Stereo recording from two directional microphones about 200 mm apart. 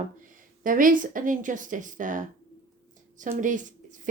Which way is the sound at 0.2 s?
40° right (ahead or behind).